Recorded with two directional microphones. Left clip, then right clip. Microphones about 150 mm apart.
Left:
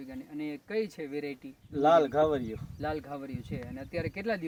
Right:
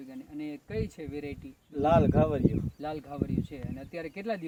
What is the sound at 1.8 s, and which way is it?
Speech, 20° right (ahead or behind).